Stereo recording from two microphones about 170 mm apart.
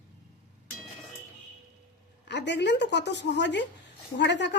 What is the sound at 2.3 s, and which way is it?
Speech, 90° left.